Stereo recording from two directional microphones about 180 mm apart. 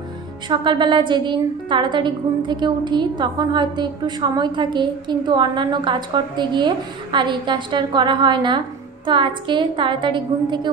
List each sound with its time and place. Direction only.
0.5 s a woman's voice: 25° right (ahead or behind)